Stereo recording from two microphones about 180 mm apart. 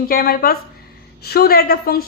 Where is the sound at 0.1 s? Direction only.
55° left (ahead or behind).